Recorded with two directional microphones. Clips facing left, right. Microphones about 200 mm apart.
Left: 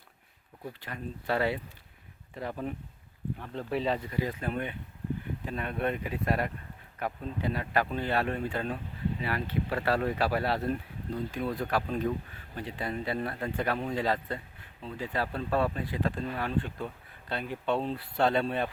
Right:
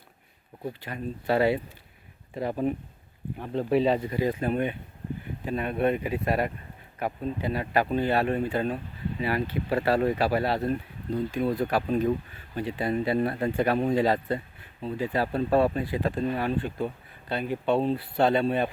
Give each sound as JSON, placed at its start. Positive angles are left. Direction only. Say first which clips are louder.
{"t": 0.7, "sound": "speech", "louder": "right 5 dB", "side_deg": -10}